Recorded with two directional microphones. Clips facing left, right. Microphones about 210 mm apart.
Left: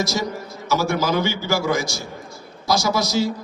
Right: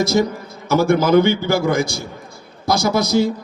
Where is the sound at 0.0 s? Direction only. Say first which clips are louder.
Right 7 dB; 55° right (ahead or behind).